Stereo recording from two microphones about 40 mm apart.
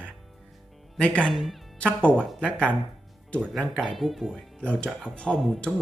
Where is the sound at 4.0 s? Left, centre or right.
Centre.